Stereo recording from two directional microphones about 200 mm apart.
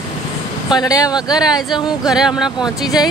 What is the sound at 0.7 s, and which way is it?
Speech, 20° left (ahead or behind).